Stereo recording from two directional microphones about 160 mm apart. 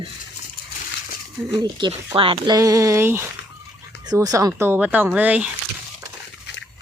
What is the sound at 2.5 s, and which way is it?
Speech, 20° right (ahead or behind).